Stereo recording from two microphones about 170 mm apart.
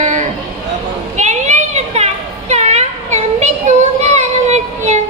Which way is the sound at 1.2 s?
45° right (ahead or behind).